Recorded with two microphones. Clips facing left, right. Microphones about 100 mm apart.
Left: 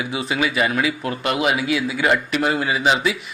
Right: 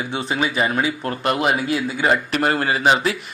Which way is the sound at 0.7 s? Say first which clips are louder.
Even; 35° right (ahead or behind).